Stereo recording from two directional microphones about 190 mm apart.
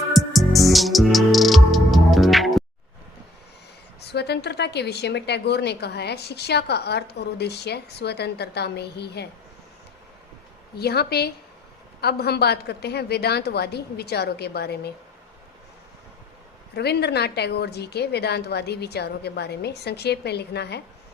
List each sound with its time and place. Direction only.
0.1 s music: centre (ahead or behind)
4.0 s a woman's voice: 60° left (ahead or behind)
10.8 s a woman's voice: 55° left (ahead or behind)
16.7 s a woman's voice: 60° left (ahead or behind)